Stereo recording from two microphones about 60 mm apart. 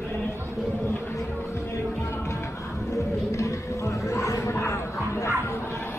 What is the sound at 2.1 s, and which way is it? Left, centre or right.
Music, left.